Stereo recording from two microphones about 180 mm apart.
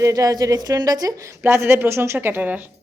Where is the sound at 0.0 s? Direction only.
20° right (ahead or behind).